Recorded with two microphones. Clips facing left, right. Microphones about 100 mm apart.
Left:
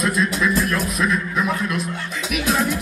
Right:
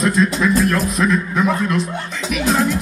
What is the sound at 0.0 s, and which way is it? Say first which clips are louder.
A man's voice: right 4 dB; 30° right (ahead or behind).